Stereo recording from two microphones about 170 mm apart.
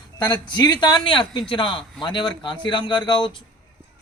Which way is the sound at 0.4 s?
25° left (ahead or behind).